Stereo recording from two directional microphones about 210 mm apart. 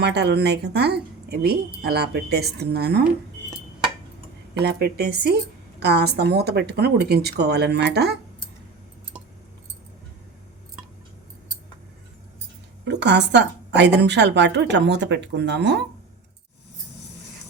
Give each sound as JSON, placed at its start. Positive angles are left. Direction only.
{"t": 0.0, "sound": "speech", "side_deg": -50}
{"t": 4.6, "sound": "speech", "side_deg": -50}
{"t": 12.8, "sound": "a woman's voice", "side_deg": -55}